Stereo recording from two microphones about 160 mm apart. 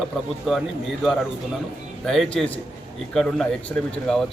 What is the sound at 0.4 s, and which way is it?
A man's voice, centre (ahead or behind).